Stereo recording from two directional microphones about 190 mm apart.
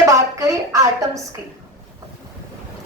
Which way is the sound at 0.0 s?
15° right (ahead or behind).